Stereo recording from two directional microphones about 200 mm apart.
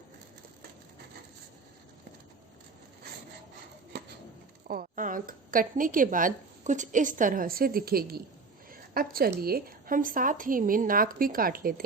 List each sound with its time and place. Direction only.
4.7 s a woman's voice: 45° right (ahead or behind)